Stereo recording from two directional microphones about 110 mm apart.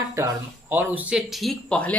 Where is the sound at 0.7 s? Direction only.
15° right (ahead or behind); by 1.9 s 10° left (ahead or behind).